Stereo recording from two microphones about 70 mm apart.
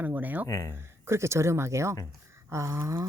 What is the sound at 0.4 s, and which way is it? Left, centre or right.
Speech, left.